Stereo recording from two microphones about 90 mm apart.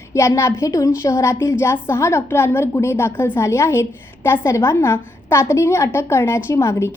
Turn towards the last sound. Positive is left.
turn(degrees=30)  # may be behind; listen again after turning